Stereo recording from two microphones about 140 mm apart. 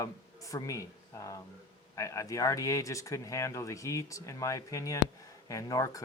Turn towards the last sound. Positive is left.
turn(degrees=25)  # may be behind; listen again after turning